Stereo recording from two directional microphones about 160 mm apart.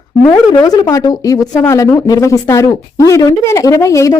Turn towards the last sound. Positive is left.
turn(degrees=20)  # may be behind; listen again after turning